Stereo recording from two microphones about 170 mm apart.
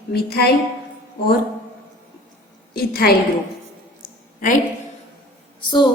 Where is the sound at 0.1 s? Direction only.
70° left (ahead or behind).